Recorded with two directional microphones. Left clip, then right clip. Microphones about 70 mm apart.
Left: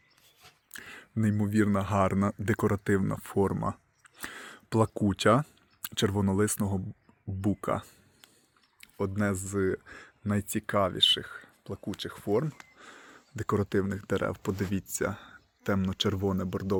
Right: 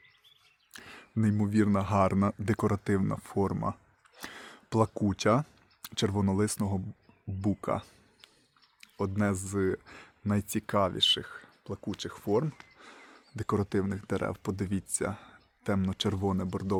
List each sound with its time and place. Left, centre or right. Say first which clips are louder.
0.7 s a sound: left 3 dB; centre
1.2 s speech: left 1 dB; centre
3.2 s speech: left 4 dB; left
4.2 s a sound: left 3 dB; centre
4.9 s speech: left 3 dB; left
5.4 s speech: left 2 dB; centre
8.8 s speech: left 1 dB; centre
10.3 s speech: left 1 dB; centre